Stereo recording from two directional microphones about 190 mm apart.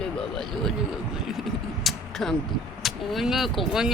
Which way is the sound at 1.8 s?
Centre (ahead or behind).